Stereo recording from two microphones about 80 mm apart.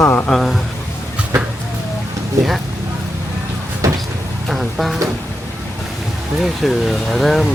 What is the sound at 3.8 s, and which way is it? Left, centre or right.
Vehicle, right.